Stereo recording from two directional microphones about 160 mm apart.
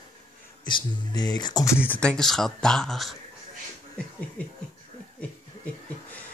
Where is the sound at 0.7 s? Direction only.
30° left (ahead or behind).